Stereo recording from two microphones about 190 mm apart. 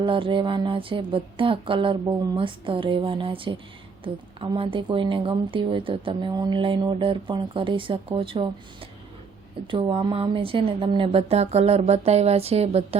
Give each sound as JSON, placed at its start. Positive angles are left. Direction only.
{"t": 0.0, "sound": "a woman's voice", "side_deg": -25}